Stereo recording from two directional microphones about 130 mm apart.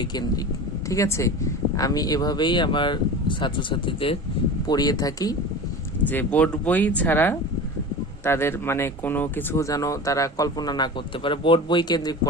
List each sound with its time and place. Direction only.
0.0 s speech: 35° left (ahead or behind)
0.9 s speech: 25° left (ahead or behind); by 4.2 s 45° left (ahead or behind)
4.6 s speech: 30° left (ahead or behind)
6.1 s speech: 10° left (ahead or behind); by 12.3 s 30° left (ahead or behind)